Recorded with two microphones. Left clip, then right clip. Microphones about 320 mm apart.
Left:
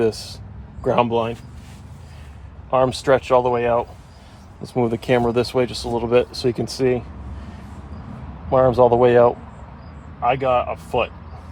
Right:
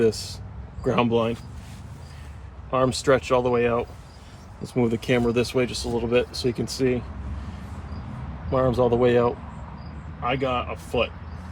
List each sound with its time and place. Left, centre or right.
0.0 s speech: centre
2.6 s speech: centre
8.4 s speech: centre